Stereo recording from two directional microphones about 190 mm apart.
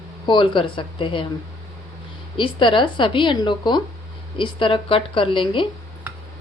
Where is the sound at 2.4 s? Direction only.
25° left (ahead or behind).